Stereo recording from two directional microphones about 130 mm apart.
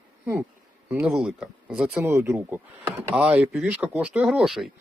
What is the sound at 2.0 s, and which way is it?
Speech, 20° right (ahead or behind).